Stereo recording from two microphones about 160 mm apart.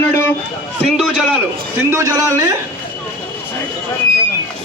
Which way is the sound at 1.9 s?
20° right (ahead or behind).